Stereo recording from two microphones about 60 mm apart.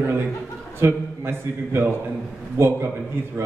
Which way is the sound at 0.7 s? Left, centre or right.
Right.